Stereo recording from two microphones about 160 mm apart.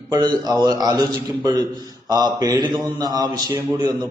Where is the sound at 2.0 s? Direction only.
25° right (ahead or behind).